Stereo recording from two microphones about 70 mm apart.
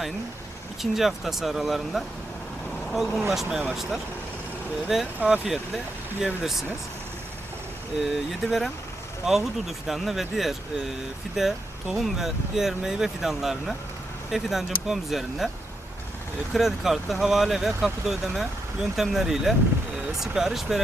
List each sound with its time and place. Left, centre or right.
0.8 s speech: centre
8.0 s speech: centre
16.6 s speech: centre